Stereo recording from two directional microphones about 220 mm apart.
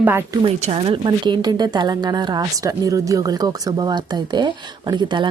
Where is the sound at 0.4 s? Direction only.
30° right (ahead or behind).